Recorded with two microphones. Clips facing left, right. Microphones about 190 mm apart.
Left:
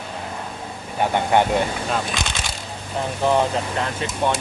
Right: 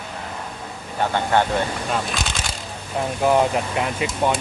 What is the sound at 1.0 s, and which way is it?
Speech, 15° left (ahead or behind).